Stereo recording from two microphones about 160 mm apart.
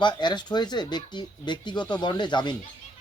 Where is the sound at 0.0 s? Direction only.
30° left (ahead or behind).